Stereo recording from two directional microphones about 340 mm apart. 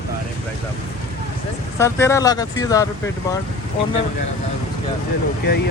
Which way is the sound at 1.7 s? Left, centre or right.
Centre.